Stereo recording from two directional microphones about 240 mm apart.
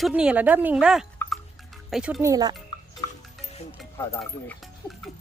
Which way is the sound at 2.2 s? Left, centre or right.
Centre.